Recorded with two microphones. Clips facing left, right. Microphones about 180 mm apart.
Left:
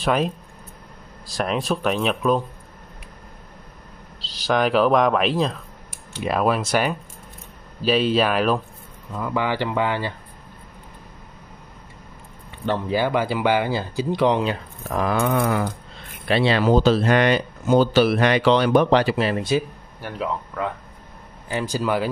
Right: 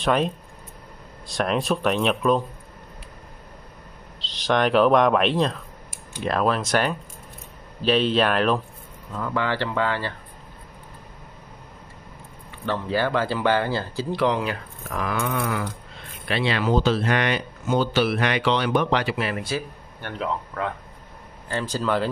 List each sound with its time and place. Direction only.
0.0 s speech: 5° left (ahead or behind)
4.2 s speech: 5° left (ahead or behind)
12.6 s speech: 15° left (ahead or behind)
14.9 s speech: 35° left (ahead or behind)
20.0 s speech: 5° left (ahead or behind)